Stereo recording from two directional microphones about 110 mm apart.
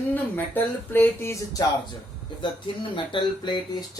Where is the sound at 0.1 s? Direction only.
15° left (ahead or behind).